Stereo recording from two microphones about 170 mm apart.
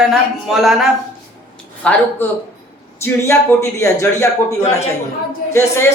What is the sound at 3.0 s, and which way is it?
A man's voice, 15° left (ahead or behind).